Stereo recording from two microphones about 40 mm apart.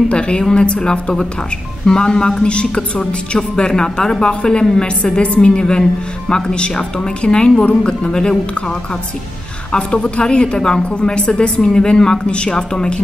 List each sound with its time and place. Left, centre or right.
0.1 s a woman's voice: left
9.7 s a woman's voice: left